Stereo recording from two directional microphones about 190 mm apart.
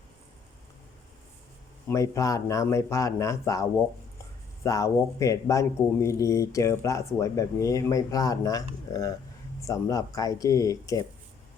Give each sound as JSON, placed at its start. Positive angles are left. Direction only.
{"t": 1.9, "sound": "a man's voice", "side_deg": 15}